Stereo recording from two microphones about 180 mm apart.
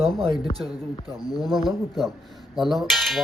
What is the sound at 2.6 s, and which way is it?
Speech, centre (ahead or behind).